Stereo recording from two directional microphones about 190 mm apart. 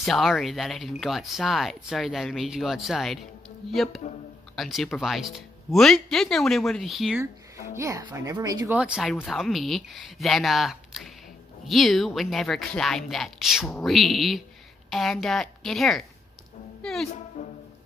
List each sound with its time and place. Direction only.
0.0 s speech: centre (ahead or behind)
7.7 s speech: 15° right (ahead or behind)
8.7 s speech: 5° right (ahead or behind)
16.8 s music: centre (ahead or behind)
17.4 s music: 40° left (ahead or behind)